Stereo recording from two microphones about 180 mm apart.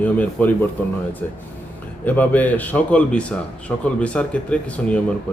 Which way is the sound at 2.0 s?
10° left (ahead or behind).